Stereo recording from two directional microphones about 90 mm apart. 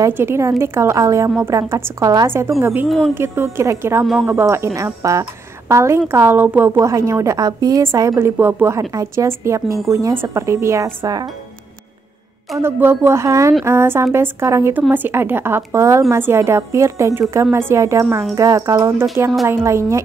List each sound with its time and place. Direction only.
0.1 s a woman's voice: 25° right (ahead or behind)
12.7 s a woman's voice: 25° right (ahead or behind)